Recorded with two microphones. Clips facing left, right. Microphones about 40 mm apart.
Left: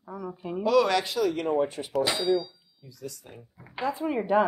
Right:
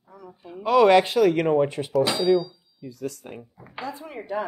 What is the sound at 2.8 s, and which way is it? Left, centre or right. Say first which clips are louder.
Speech: right 8 dB; right.